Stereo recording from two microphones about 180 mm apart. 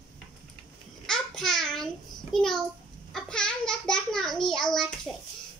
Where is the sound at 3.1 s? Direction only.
5° left (ahead or behind).